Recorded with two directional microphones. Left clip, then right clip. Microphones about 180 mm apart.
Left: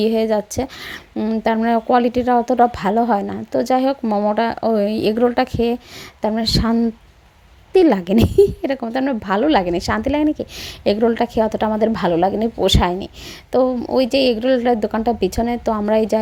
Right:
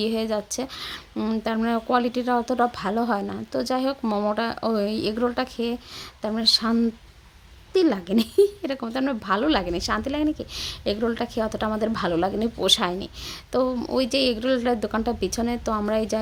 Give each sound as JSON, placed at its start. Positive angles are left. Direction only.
{"t": 0.0, "sound": "speech", "side_deg": 20}
{"t": 1.1, "sound": "speech", "side_deg": 10}
{"t": 4.0, "sound": "speech", "side_deg": 10}